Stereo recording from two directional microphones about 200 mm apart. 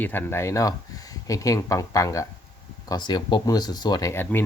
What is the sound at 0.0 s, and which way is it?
Speech, 10° left (ahead or behind).